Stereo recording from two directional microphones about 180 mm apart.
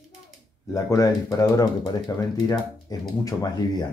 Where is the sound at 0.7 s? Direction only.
20° left (ahead or behind).